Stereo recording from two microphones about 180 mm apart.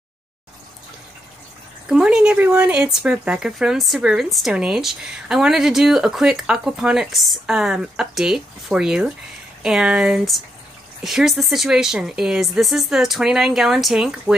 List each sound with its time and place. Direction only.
1.9 s speech: 5° right (ahead or behind)